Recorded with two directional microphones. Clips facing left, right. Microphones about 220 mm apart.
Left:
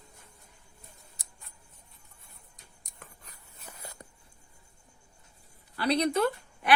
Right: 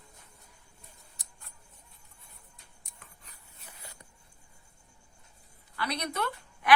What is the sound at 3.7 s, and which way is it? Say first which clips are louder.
Writing: left 6 dB; 45° left (ahead or behind).